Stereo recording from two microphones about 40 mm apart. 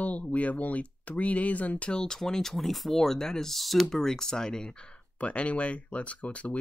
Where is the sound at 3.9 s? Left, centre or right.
Centre; by 6.5 s left.